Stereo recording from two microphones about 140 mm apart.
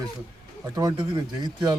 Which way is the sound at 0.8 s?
25° right (ahead or behind).